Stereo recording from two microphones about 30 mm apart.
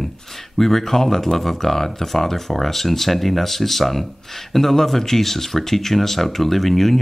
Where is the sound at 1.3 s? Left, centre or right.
Centre.